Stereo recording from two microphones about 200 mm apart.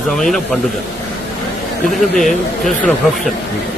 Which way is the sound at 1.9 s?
Centre (ahead or behind).